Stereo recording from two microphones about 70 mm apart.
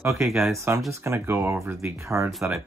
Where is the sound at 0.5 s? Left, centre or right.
Right.